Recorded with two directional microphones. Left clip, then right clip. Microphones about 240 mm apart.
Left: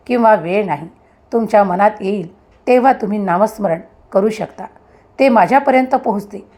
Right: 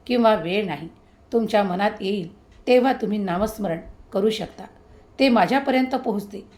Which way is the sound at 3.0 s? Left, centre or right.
Centre.